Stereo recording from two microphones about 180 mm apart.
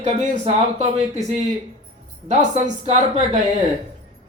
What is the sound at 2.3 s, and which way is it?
Speech, 40° right (ahead or behind).